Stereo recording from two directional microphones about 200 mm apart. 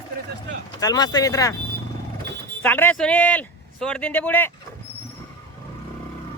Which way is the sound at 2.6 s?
10° left (ahead or behind).